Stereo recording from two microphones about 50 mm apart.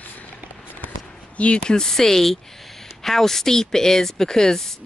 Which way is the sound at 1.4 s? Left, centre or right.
Centre.